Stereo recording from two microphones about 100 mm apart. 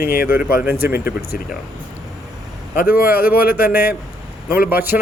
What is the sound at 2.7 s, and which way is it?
Speech, 20° right (ahead or behind).